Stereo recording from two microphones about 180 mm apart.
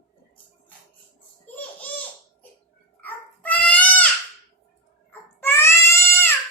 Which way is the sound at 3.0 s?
5° left (ahead or behind).